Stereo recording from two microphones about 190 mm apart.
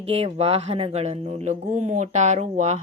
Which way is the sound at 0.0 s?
35° right (ahead or behind).